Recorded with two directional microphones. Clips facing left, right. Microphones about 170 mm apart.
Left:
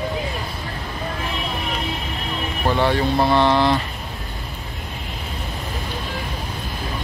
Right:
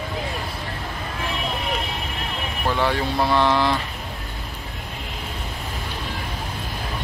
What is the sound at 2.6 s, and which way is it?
Speech, 20° left (ahead or behind).